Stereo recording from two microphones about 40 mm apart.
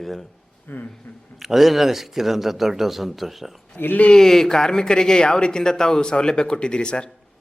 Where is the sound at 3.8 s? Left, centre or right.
Left.